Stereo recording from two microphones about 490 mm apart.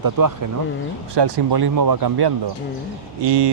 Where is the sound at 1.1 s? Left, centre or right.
Right.